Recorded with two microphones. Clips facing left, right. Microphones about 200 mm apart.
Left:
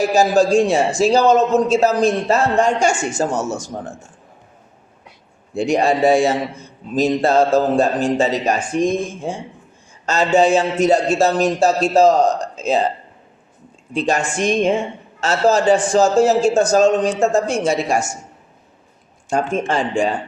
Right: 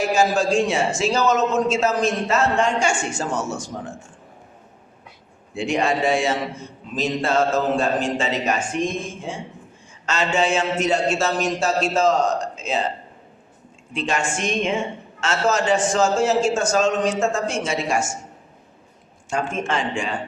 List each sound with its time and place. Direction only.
0.1 s a man's voice: 40° left (ahead or behind)
5.5 s a man's voice: 40° left (ahead or behind)
13.9 s a man's voice: 35° left (ahead or behind)
19.3 s a man's voice: 35° left (ahead or behind)